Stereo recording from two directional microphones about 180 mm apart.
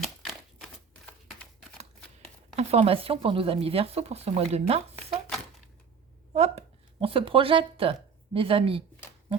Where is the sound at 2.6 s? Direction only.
35° right (ahead or behind).